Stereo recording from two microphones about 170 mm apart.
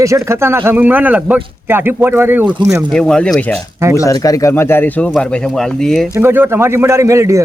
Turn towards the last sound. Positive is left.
turn(degrees=-20)  # may be behind; listen again after turning